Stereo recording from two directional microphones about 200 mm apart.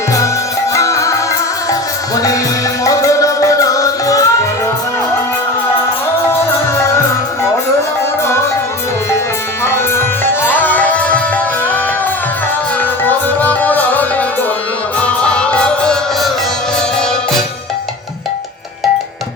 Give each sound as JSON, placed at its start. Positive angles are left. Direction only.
{"t": 0.7, "sound": "music", "side_deg": 15}
{"t": 9.6, "sound": "music", "side_deg": 10}
{"t": 12.8, "sound": "music", "side_deg": 10}